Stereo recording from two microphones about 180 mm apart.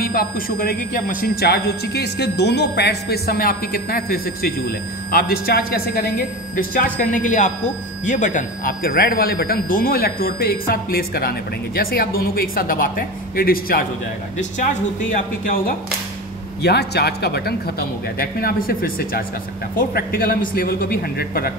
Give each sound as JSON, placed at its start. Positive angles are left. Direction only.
{"t": 0.0, "sound": "speech", "side_deg": 55}
{"t": 16.6, "sound": "speech", "side_deg": 65}